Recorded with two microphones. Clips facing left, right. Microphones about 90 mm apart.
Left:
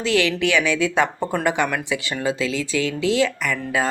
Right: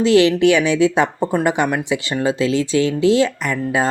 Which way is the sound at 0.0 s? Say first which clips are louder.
Right 8 dB; 25° right (ahead or behind).